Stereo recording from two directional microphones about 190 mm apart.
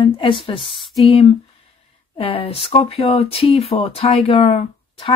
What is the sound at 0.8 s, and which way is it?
Speech, centre (ahead or behind).